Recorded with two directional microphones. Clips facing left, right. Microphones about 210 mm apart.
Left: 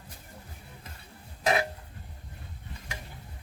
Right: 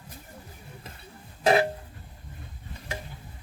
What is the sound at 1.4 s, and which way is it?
Music, 30° right (ahead or behind).